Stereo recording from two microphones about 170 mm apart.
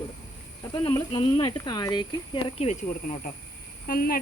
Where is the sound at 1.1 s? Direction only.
30° left (ahead or behind).